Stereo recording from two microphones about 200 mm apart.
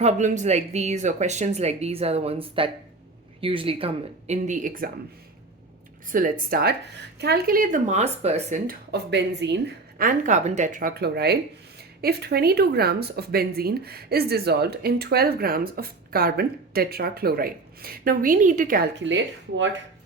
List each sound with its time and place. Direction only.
0.0 s speech: 35° right (ahead or behind)
6.1 s speech: 45° right (ahead or behind)
8.9 s speech: 60° right (ahead or behind)